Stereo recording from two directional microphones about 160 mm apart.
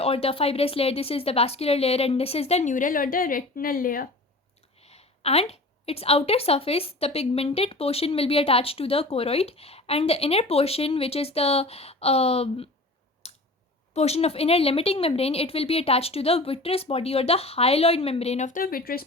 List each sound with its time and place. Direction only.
0.0 s a woman's voice: 40° left (ahead or behind); by 4.1 s 65° left (ahead or behind)
4.8 s a woman's voice: 40° left (ahead or behind)
13.2 s a sound: 40° left (ahead or behind)
13.9 s a woman's voice: 40° left (ahead or behind); by 19.0 s 70° left (ahead or behind)